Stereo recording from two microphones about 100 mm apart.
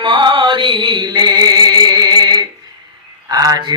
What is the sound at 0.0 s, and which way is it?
Music, 55° right (ahead or behind).